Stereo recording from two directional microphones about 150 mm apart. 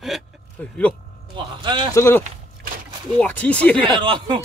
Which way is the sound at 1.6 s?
30° right (ahead or behind).